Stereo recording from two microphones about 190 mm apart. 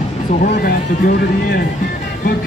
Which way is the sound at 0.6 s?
55° left (ahead or behind).